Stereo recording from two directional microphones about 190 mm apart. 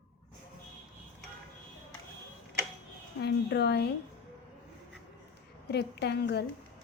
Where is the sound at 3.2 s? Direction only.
60° left (ahead or behind).